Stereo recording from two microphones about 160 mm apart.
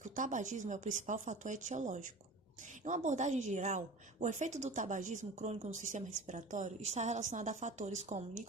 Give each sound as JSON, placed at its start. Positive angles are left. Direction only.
{"t": 0.0, "sound": "a woman's voice", "side_deg": -50}